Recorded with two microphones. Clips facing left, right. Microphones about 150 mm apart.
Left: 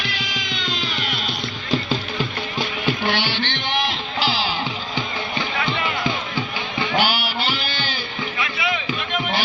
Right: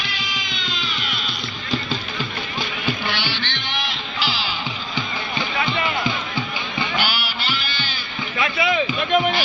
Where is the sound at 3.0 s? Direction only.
50° left (ahead or behind).